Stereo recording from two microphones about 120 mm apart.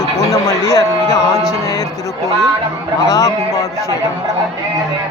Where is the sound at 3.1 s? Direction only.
25° left (ahead or behind).